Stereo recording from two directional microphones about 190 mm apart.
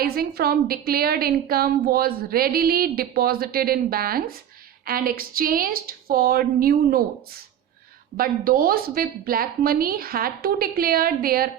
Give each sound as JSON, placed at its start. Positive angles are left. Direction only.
{"t": 0.0, "sound": "a woman's voice", "side_deg": -55}